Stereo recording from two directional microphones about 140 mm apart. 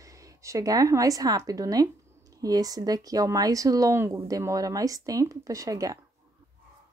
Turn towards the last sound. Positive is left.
turn(degrees=-25)  # may be behind; listen again after turning